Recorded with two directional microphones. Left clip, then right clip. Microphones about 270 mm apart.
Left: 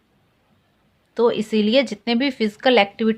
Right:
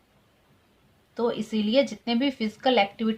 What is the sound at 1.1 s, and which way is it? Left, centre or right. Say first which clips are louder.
Speech: left 9 dB; left.